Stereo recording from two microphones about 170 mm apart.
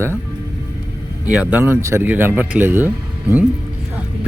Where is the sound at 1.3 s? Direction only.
10° right (ahead or behind).